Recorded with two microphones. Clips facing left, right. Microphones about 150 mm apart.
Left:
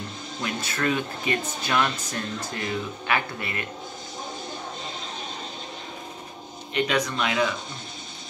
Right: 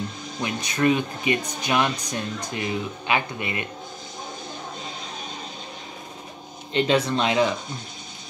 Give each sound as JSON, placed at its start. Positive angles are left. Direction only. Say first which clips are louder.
{"t": 0.4, "sound": "speech", "louder": "right 5 dB", "side_deg": -20}
{"t": 6.7, "sound": "speech", "louder": "right 4 dB", "side_deg": -30}